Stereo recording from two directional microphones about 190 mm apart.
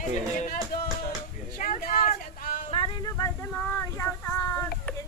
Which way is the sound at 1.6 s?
45° left (ahead or behind).